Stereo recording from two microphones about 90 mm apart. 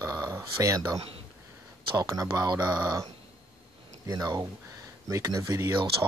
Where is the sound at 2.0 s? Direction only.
40° right (ahead or behind).